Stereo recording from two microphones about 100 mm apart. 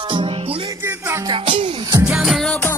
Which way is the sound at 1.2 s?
55° right (ahead or behind).